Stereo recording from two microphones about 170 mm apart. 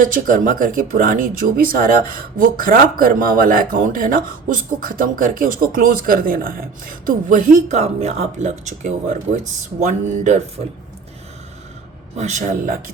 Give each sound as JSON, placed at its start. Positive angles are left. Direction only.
{"t": 0.0, "sound": "speech", "side_deg": -50}
{"t": 12.1, "sound": "speech", "side_deg": -45}